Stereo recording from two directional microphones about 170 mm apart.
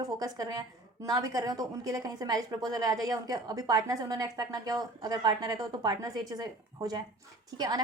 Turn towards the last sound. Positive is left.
turn(degrees=-25)  # may be behind; listen again after turning